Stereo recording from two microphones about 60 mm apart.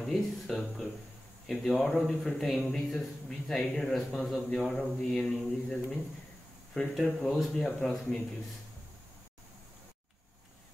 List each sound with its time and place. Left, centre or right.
0.0 s speech: centre
7.8 s speech: centre